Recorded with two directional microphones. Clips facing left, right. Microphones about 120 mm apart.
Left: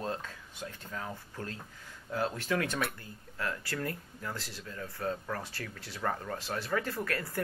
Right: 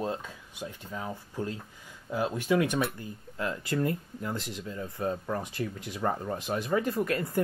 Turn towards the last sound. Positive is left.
turn(degrees=-20)  # may be behind; listen again after turning